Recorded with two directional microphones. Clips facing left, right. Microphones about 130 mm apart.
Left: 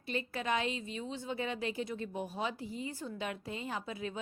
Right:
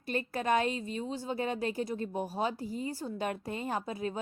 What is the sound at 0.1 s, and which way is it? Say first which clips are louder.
A woman's voice: right 5 dB; 45° right (ahead or behind).